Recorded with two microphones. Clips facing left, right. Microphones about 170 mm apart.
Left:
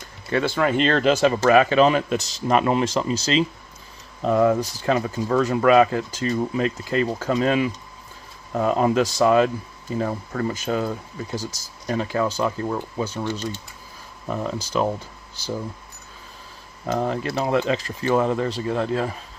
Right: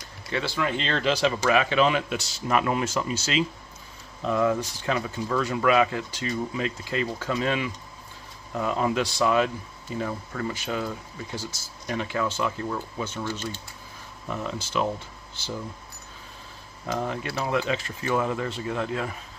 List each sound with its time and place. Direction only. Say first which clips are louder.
0.3 s speech: left 7 dB; 50° left (ahead or behind)
14.2 s speech: left 5 dB; 40° left (ahead or behind)
16.8 s speech: left 5 dB; 40° left (ahead or behind)